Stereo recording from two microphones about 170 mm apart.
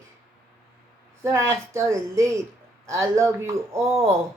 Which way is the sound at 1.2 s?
15° right (ahead or behind).